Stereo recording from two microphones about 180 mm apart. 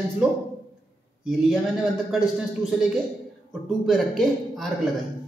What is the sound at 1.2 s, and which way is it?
Speech, 5° right (ahead or behind).